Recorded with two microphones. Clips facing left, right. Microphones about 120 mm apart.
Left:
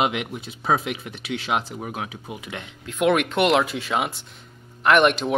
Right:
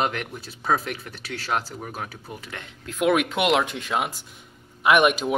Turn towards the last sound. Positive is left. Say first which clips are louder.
# left 1 dB
turn(degrees=-5)  # may be behind; listen again after turning